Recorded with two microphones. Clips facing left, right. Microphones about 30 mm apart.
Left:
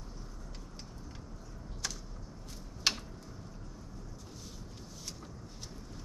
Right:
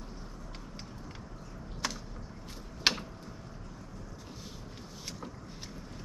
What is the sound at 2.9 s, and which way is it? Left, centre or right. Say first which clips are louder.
Tick-tock: right 4 dB; right.